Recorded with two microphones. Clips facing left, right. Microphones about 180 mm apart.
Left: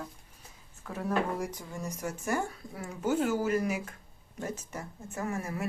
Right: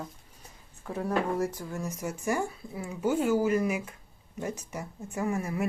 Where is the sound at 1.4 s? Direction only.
15° left (ahead or behind).